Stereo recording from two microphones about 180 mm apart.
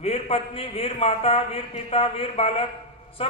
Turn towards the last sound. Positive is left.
turn(degrees=30)  # may be behind; listen again after turning